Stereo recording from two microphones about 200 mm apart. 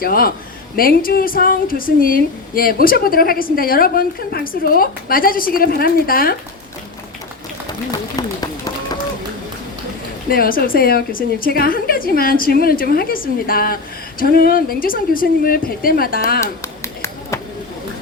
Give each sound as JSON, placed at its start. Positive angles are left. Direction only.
{"t": 0.0, "sound": "speech", "side_deg": 50}
{"t": 7.9, "sound": "run", "side_deg": 20}
{"t": 10.2, "sound": "speech", "side_deg": 45}
{"t": 16.4, "sound": "a sound", "side_deg": 15}